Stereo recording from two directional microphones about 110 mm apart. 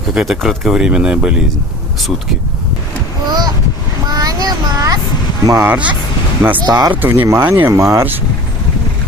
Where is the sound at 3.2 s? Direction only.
40° right (ahead or behind).